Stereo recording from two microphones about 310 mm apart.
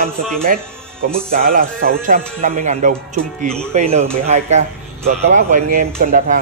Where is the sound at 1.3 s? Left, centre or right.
Right.